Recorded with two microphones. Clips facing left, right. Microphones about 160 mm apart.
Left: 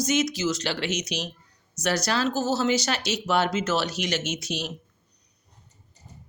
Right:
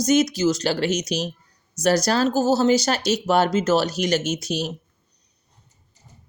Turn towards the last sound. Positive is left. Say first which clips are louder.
# right 5 dB
turn(degrees=-40)  # may be behind; listen again after turning